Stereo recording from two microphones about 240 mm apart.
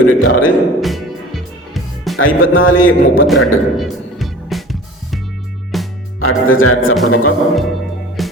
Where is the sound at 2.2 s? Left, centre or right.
Left.